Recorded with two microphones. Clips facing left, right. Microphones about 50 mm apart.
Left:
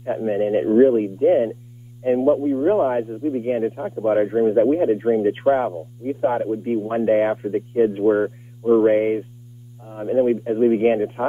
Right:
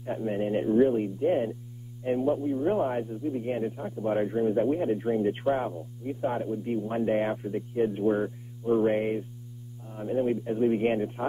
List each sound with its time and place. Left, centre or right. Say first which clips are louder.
0.0 s a man's voice: left 8 dB; left